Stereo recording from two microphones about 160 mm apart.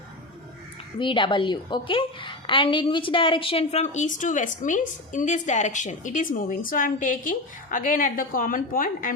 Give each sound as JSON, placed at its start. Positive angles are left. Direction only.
{"t": 0.9, "sound": "a woman's voice", "side_deg": 30}